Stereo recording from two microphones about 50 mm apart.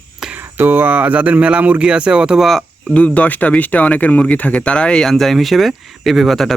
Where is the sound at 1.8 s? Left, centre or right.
Centre.